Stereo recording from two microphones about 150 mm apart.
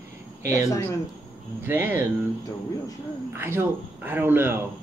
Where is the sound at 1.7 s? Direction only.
15° right (ahead or behind).